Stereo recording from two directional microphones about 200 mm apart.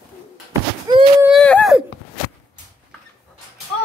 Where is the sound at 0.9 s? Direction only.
20° right (ahead or behind).